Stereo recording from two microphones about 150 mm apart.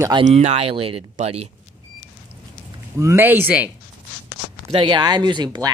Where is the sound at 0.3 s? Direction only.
45° right (ahead or behind).